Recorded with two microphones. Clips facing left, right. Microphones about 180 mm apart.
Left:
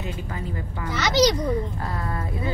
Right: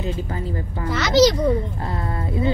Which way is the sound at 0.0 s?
35° right (ahead or behind).